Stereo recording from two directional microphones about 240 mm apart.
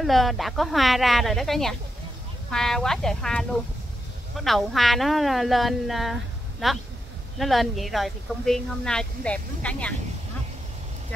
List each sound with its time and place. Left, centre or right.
0.0 s speech: centre